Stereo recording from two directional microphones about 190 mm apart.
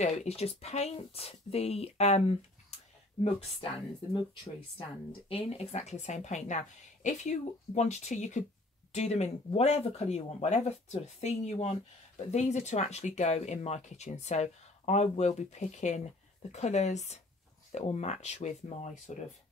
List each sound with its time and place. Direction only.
0.0 s speech: 35° left (ahead or behind)
5.3 s speech: 35° left (ahead or behind)